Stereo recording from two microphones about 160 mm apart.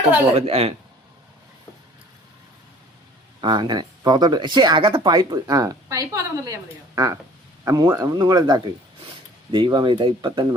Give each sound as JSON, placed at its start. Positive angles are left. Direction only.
{"t": 0.3, "sound": "speech", "side_deg": -40}
{"t": 3.4, "sound": "speech", "side_deg": -25}